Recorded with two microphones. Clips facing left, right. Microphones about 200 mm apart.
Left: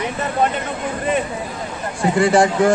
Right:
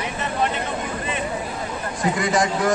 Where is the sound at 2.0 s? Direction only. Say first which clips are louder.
Left 7 dB; 30° left (ahead or behind).